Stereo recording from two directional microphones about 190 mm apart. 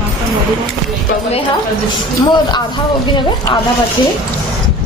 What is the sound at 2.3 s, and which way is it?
Speech, 20° left (ahead or behind).